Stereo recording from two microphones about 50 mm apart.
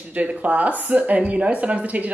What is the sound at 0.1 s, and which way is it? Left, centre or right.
A woman's voice, right.